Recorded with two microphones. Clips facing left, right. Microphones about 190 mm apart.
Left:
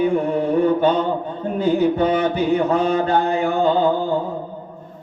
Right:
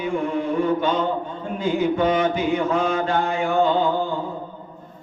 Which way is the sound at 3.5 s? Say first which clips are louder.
Left 1 dB; 35° left (ahead or behind).